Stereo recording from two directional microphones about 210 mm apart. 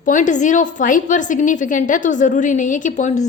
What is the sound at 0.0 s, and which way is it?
A woman's voice, 35° left (ahead or behind).